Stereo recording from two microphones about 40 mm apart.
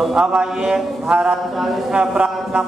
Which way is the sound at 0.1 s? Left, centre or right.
Right.